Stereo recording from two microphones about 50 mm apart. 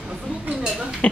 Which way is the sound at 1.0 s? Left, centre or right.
Left.